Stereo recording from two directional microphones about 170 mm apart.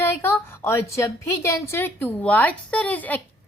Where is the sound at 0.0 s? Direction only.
15° left (ahead or behind).